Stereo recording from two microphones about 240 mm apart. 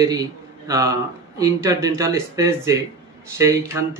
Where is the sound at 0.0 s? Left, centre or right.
Centre.